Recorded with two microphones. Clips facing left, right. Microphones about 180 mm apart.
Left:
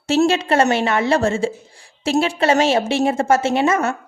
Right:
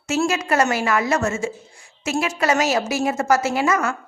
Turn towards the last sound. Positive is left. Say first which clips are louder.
# left 3 dB
turn(degrees=25)  # may be behind; listen again after turning